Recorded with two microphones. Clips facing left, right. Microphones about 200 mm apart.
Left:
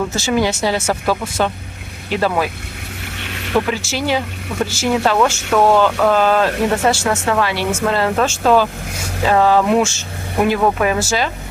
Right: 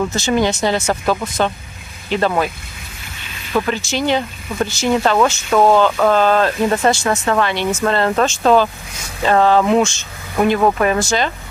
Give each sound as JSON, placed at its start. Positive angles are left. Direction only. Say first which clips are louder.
{"t": 0.1, "sound": "speech", "louder": "right 1 dB", "side_deg": 10}
{"t": 3.2, "sound": "a sound", "louder": "left 2 dB", "side_deg": 70}
{"t": 3.6, "sound": "speech", "louder": "right 1 dB", "side_deg": 5}